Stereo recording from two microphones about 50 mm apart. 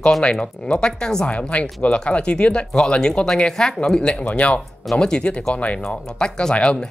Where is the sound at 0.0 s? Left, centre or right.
Centre.